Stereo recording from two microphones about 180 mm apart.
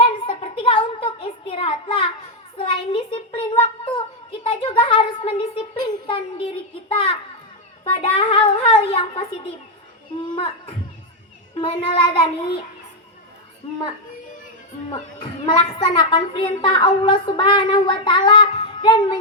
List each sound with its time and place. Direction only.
0.3 s a sound: 30° left (ahead or behind)
6.9 s a woman's voice: 30° left (ahead or behind)
15.2 s a woman's voice: 25° left (ahead or behind)